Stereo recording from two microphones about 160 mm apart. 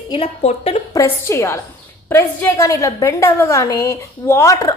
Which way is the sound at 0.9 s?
15° left (ahead or behind).